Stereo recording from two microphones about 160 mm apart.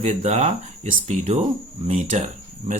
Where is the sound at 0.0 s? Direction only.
45° right (ahead or behind).